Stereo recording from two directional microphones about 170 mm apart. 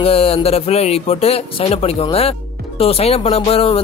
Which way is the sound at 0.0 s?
35° left (ahead or behind).